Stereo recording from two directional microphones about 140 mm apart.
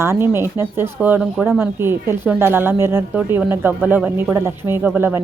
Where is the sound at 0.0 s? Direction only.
20° right (ahead or behind).